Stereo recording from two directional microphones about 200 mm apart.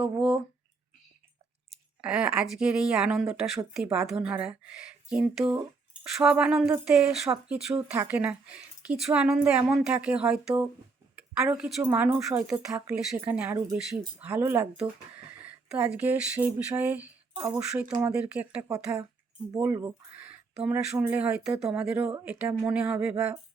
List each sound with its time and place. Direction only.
0.0 s speech: 5° right (ahead or behind)
2.0 s speech: 5° right (ahead or behind)
17.3 s speech: 20° right (ahead or behind)
17.7 s speech: 5° right (ahead or behind)